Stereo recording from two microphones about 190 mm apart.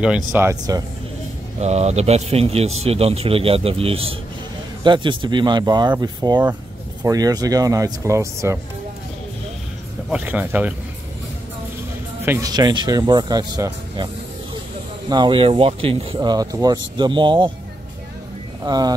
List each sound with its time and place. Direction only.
0.0 s speech: 5° right (ahead or behind)
1.6 s speech: 35° right (ahead or behind); by 8.5 s 15° right (ahead or behind)
10.0 s speech: 5° right (ahead or behind)
12.3 s speech: 20° right (ahead or behind)
15.0 s speech: 25° right (ahead or behind)
16.2 s speech: 20° right (ahead or behind)
18.6 s speech: 20° right (ahead or behind)